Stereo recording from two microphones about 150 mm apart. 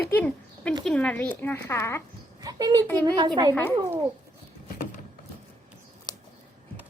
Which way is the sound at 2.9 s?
25° right (ahead or behind).